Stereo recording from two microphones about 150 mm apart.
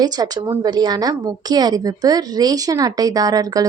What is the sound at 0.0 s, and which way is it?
A woman's voice, 25° right (ahead or behind).